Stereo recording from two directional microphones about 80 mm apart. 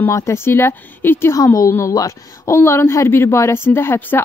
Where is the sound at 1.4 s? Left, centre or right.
Left.